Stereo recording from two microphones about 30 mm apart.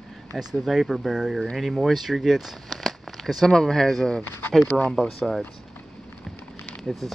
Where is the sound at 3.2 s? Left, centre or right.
Centre.